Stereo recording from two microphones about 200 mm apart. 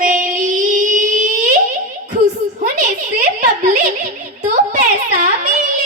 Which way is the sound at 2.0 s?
35° right (ahead or behind).